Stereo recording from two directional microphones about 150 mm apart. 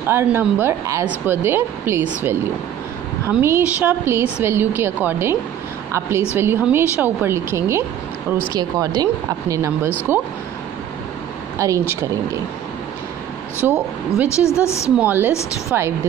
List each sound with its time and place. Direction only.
0.0 s a woman's voice: 15° right (ahead or behind)
3.3 s a woman's voice: 15° right (ahead or behind)
11.5 s speech: 20° right (ahead or behind)
13.7 s a woman's voice: 15° right (ahead or behind)
14.3 s a woman's voice: 20° left (ahead or behind)
15.0 s a woman's voice: 15° right (ahead or behind)